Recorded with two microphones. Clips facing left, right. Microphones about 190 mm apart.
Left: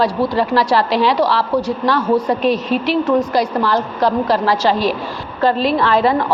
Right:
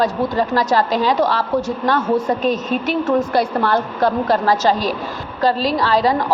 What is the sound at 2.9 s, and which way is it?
A woman's voice, 50° right (ahead or behind).